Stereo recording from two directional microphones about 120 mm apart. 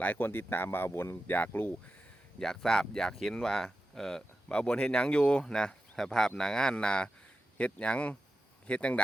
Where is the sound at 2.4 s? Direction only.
5° left (ahead or behind).